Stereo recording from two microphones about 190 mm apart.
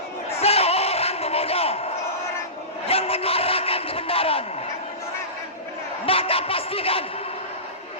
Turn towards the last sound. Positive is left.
turn(degrees=30)  # may be behind; listen again after turning